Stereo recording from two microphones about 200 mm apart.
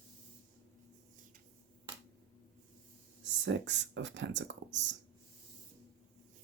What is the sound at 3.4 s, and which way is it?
Speech, 65° right (ahead or behind).